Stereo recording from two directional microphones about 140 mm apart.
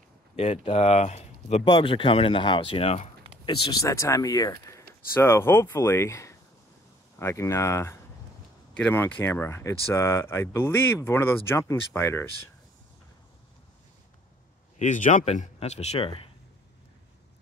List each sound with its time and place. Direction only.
0.4 s speech: 50° left (ahead or behind)
1.6 s speech: 35° left (ahead or behind)
3.4 s speech: 25° left (ahead or behind)
14.8 s a man's voice: 65° left (ahead or behind); by 16.3 s 40° left (ahead or behind)